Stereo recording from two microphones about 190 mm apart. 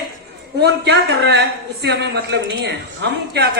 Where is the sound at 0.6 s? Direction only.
60° right (ahead or behind).